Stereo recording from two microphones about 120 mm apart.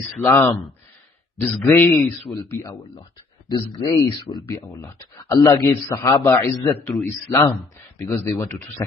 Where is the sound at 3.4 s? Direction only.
35° left (ahead or behind); by 6.5 s 20° left (ahead or behind).